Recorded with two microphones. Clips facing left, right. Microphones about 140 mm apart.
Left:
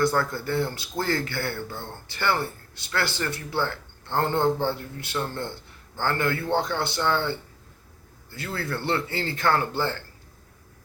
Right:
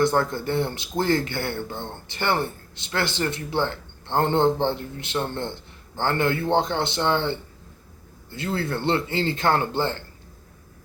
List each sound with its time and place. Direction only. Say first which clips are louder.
0.0 s speech: right 3 dB; 20° right (ahead or behind)